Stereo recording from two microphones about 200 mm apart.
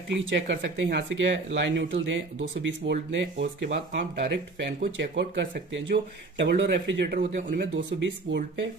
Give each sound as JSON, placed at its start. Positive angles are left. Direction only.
{"t": 0.3, "sound": "speech", "side_deg": -65}